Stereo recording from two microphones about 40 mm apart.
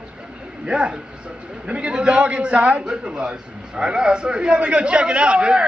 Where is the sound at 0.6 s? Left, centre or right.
Right.